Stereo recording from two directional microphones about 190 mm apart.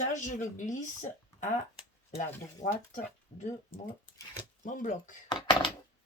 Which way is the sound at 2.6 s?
40° left (ahead or behind).